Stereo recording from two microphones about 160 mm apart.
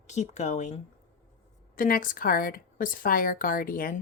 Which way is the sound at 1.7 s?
60° left (ahead or behind).